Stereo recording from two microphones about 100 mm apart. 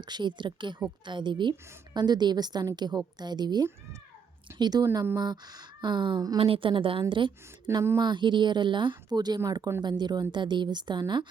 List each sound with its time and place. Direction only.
0.0 s a woman's voice: 50° right (ahead or behind)
6.4 s a woman's voice: 65° right (ahead or behind)